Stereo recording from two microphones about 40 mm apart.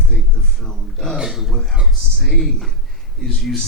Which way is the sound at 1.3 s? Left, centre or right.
Centre.